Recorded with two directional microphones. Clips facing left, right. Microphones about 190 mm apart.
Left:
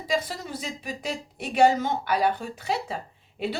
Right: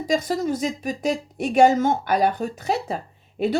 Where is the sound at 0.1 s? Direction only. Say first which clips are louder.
Right 6 dB; 45° right (ahead or behind).